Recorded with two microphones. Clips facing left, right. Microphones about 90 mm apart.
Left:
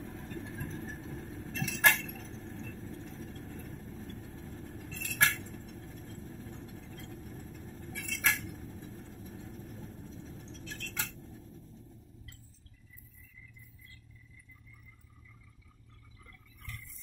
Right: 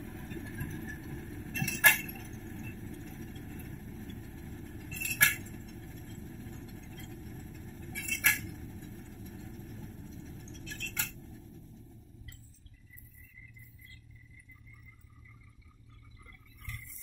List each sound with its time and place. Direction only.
0.0 s vehicle: 25° left (ahead or behind)